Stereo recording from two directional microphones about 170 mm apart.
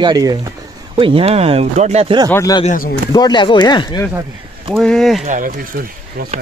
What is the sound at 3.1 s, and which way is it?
Speech, 25° left (ahead or behind).